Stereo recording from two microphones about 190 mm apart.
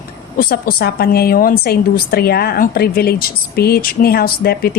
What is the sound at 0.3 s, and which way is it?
A woman's voice, 50° left (ahead or behind).